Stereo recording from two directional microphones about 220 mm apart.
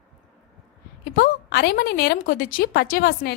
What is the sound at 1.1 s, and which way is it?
A woman's voice, 45° left (ahead or behind).